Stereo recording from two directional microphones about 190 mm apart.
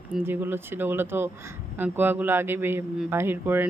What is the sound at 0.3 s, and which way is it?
Speech, 10° right (ahead or behind).